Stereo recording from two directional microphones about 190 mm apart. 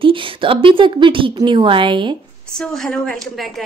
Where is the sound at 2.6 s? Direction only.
Centre (ahead or behind).